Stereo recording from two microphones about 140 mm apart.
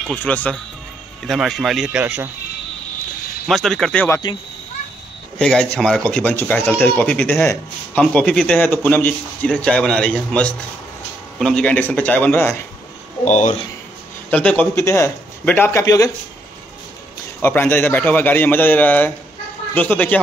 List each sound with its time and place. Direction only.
0.0 s speech: 10° left (ahead or behind)
1.2 s speech: centre (ahead or behind)
3.4 s speech: centre (ahead or behind)
5.4 s speech: 5° left (ahead or behind)
13.2 s speech: 55° left (ahead or behind)
14.3 s speech: 10° left (ahead or behind)
17.4 s speech: 15° left (ahead or behind)